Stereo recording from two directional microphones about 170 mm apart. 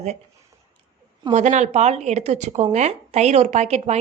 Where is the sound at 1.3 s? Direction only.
45° right (ahead or behind).